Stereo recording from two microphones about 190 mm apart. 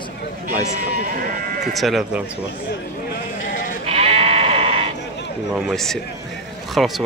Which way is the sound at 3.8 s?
30° right (ahead or behind).